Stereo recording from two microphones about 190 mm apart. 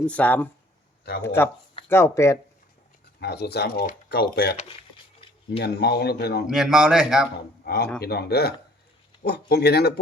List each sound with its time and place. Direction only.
0.0 s speech: 5° left (ahead or behind)
1.9 s speech: 15° left (ahead or behind)
3.2 s speech: 60° left (ahead or behind)
5.5 s speech: 60° left (ahead or behind)
6.5 s a man's voice: centre (ahead or behind)
7.6 s speech: 55° left (ahead or behind)